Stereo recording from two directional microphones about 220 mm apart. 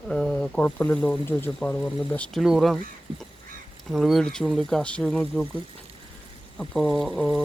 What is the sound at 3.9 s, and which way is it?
Speech, centre (ahead or behind).